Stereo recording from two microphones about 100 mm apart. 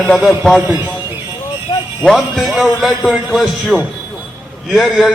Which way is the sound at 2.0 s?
Centre (ahead or behind).